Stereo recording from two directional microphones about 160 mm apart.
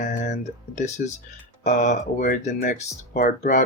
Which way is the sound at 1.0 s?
60° left (ahead or behind).